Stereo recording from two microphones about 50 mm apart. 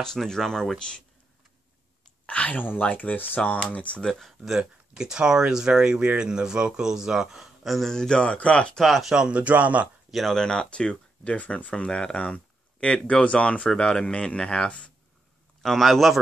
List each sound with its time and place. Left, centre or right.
0.0 s speech: centre
2.2 s a sound: left
2.8 s speech: left
4.1 s speech: centre
4.5 s speech: centre
7.6 s speech: centre
8.2 s speech: left
8.7 s a man's voice: centre
9.1 s speech: centre
9.4 s speech: right
10.3 s speech: centre
15.6 s a man's voice: centre